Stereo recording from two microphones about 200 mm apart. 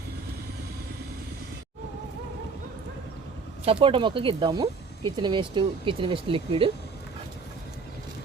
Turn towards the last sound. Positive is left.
turn(degrees=-25)  # may be behind; listen again after turning